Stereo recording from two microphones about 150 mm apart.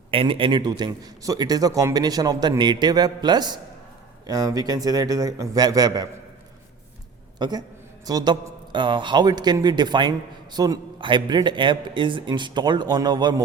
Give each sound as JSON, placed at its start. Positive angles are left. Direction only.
{"t": 0.1, "sound": "a man's voice", "side_deg": -35}
{"t": 7.3, "sound": "a woman's voice", "side_deg": -30}